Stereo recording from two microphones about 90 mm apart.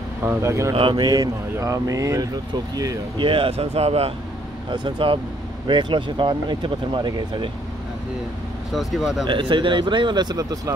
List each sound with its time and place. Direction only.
0.2 s speech: 30° right (ahead or behind)
0.7 s speech: 70° right (ahead or behind)
1.0 s speech: 40° right (ahead or behind)
3.2 s speech: 85° right
4.6 s speech: 65° right (ahead or behind)
8.7 s speech: centre (ahead or behind)
9.2 s speech: 65° right (ahead or behind); by 10.7 s 45° right (ahead or behind)